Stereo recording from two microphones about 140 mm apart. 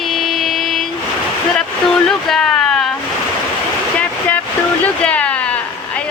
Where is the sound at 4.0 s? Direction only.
10° left (ahead or behind).